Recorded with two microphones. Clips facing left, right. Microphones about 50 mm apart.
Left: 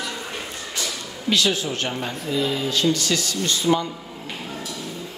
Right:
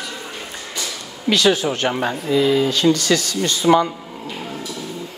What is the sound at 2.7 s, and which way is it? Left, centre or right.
Speech, right.